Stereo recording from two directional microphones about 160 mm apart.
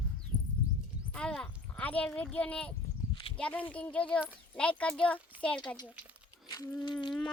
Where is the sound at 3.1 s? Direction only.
35° left (ahead or behind).